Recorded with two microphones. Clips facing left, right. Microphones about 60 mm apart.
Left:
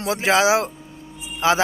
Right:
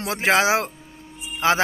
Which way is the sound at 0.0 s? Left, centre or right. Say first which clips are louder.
Left 1 dB; right.